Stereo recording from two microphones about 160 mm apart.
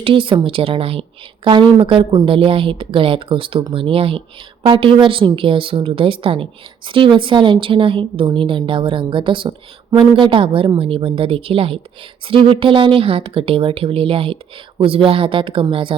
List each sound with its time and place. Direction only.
0.0 s a woman's voice: 35° right (ahead or behind)